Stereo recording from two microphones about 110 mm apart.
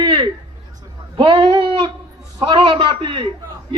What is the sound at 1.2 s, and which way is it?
A man's voice, 55° right (ahead or behind).